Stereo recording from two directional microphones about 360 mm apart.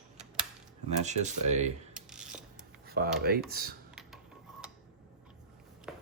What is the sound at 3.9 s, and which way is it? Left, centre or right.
Mechanisms, centre.